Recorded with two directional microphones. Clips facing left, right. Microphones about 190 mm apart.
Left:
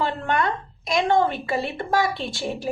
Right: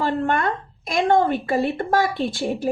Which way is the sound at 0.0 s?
50° right (ahead or behind).